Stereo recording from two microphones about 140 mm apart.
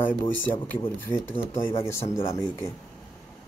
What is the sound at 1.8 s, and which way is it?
Speech, 20° left (ahead or behind).